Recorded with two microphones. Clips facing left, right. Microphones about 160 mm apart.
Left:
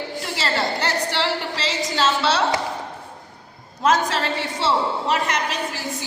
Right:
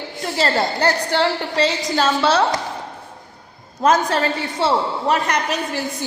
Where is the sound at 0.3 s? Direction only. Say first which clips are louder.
Right 5 dB; 45° right (ahead or behind).